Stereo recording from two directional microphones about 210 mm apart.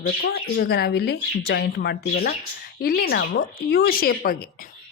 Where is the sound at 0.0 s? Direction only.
50° left (ahead or behind).